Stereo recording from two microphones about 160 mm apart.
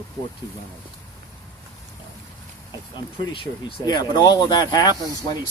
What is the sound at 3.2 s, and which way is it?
Speech, 30° left (ahead or behind).